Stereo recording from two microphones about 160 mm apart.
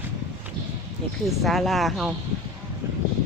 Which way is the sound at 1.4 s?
Centre (ahead or behind).